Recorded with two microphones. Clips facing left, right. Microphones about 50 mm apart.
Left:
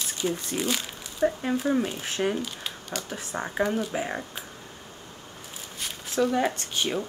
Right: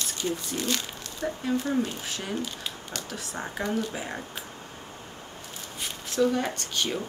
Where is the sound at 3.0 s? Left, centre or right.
Left.